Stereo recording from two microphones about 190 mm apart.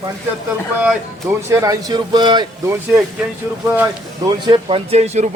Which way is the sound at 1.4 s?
15° right (ahead or behind).